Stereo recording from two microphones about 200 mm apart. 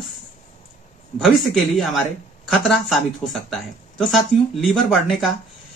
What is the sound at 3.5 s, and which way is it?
Speech, centre (ahead or behind).